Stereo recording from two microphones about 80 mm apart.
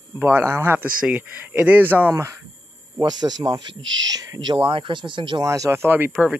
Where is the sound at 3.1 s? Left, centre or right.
Right.